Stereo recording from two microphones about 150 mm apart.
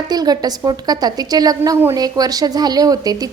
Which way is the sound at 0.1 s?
25° right (ahead or behind).